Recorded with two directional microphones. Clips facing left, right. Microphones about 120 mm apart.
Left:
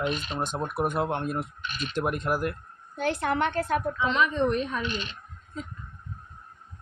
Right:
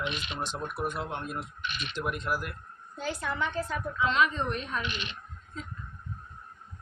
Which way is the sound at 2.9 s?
65° left (ahead or behind).